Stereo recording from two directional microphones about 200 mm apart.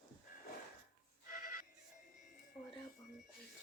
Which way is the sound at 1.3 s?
45° left (ahead or behind).